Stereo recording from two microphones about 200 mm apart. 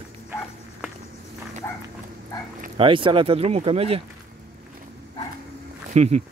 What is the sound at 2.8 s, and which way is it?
Speech, 25° right (ahead or behind).